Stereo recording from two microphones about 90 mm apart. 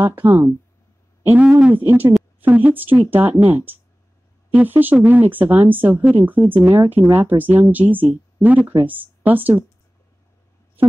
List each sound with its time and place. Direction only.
0.0 s speech: 20° right (ahead or behind)